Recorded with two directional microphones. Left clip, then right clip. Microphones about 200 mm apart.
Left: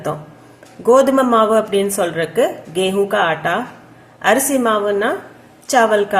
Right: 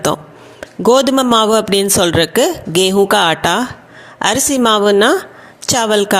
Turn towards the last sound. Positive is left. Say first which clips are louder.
# even
turn(degrees=-50)  # may be behind; listen again after turning